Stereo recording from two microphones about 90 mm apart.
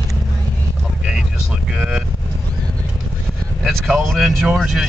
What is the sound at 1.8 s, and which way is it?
Vehicle, 5° right (ahead or behind).